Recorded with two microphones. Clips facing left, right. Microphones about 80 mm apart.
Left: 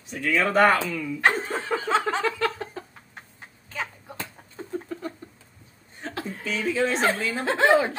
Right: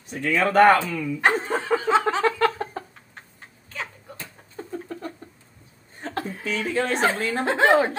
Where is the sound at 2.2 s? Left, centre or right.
Right.